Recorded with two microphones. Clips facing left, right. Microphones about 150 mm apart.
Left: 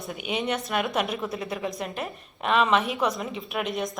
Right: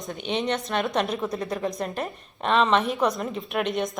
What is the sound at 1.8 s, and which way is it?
Speech, 35° right (ahead or behind).